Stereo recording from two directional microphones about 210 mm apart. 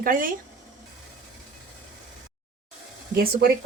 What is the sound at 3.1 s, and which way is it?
Speech, 45° right (ahead or behind).